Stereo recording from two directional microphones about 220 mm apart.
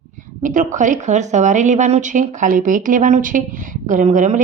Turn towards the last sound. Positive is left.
turn(degrees=-35)  # may be behind; listen again after turning